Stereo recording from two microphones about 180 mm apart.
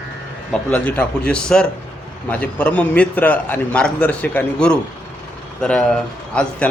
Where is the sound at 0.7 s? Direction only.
5° left (ahead or behind).